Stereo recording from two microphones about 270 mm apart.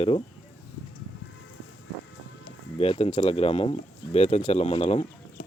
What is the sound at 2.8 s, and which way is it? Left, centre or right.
Speech, left.